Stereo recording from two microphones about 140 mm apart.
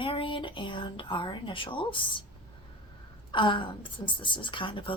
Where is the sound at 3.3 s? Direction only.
35° left (ahead or behind).